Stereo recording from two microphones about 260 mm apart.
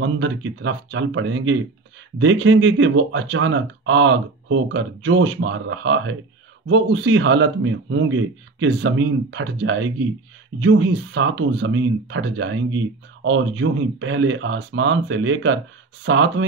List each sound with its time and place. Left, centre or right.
0.0 s speech: right